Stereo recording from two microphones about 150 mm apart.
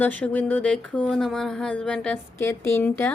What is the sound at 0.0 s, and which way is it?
Speech, 10° left (ahead or behind).